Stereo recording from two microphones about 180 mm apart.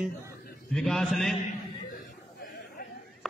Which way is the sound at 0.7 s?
5° left (ahead or behind).